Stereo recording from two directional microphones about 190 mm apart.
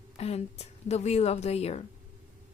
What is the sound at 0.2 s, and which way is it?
A woman's voice, 35° left (ahead or behind).